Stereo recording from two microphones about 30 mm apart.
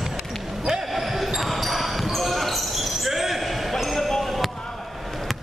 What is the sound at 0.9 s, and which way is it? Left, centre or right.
Basketball bounce, centre.